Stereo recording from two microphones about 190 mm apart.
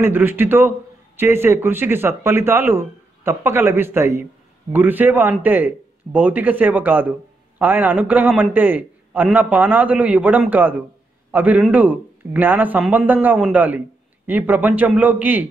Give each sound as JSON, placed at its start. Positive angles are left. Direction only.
{"t": 0.0, "sound": "a man's voice", "side_deg": -10}